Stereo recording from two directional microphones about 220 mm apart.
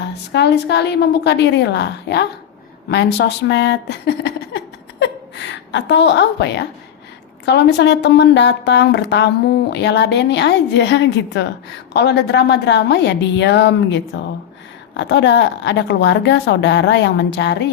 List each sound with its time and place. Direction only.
0.0 s a woman's voice: 50° left (ahead or behind)